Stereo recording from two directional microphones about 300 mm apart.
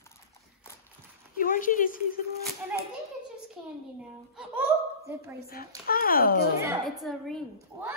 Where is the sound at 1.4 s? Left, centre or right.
Left.